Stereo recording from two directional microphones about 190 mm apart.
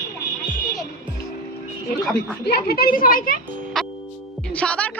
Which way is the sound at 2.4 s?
55° left (ahead or behind).